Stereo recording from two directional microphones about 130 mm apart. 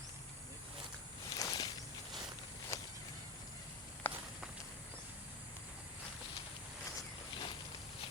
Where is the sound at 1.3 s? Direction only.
30° left (ahead or behind).